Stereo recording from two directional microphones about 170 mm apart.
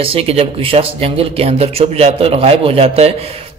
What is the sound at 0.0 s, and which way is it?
A man's voice, 35° right (ahead or behind).